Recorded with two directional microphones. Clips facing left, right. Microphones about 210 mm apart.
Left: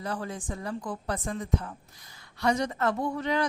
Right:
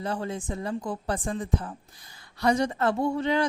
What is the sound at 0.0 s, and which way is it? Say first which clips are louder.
Speech: right 3 dB; 25° right (ahead or behind).